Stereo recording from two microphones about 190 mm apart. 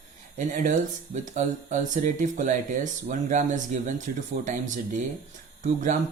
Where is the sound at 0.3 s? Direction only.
40° right (ahead or behind).